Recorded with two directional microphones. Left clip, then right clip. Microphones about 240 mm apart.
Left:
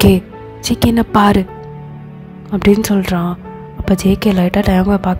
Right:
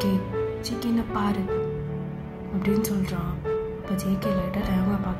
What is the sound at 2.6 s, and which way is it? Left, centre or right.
Speech, left.